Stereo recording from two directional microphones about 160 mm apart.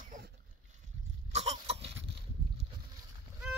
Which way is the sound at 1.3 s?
40° right (ahead or behind).